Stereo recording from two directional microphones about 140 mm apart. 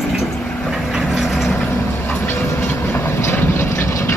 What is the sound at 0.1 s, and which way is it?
Vehicle, centre (ahead or behind).